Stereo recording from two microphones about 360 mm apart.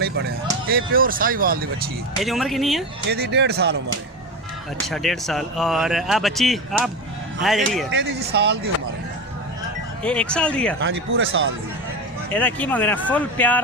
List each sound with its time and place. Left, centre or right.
0.0 s a sound: right
0.7 s speech: right
2.1 s speech: centre
3.1 s speech: right
4.9 s speech: centre
7.9 s speech: right
10.0 s speech: centre
10.9 s speech: right
12.3 s speech: centre